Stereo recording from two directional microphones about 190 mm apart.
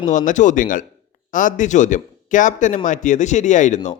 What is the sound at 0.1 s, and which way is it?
A man's voice, 40° left (ahead or behind).